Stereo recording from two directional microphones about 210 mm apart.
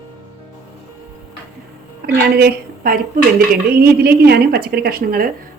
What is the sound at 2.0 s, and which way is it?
A woman's voice, 50° right (ahead or behind).